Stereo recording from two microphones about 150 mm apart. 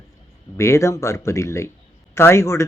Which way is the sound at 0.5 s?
20° left (ahead or behind).